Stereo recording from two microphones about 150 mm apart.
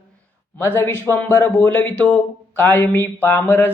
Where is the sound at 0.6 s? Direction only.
15° left (ahead or behind).